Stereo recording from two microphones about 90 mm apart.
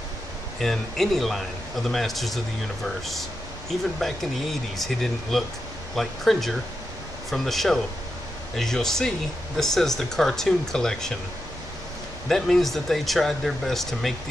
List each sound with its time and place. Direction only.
0.6 s speech: 5° left (ahead or behind)
12.3 s speech: 5° left (ahead or behind)